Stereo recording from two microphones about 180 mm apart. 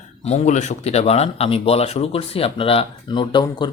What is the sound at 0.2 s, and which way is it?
Speech, 35° left (ahead or behind).